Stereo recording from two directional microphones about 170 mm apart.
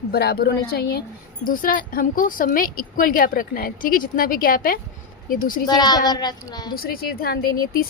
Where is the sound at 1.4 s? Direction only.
55° left (ahead or behind).